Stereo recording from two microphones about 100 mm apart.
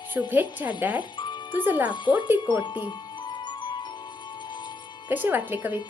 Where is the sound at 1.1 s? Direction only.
50° left (ahead or behind).